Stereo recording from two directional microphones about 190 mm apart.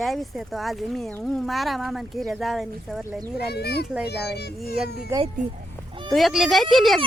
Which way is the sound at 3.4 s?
60° left (ahead or behind).